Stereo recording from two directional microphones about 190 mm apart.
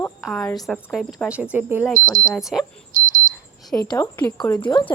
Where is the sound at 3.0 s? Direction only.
50° right (ahead or behind).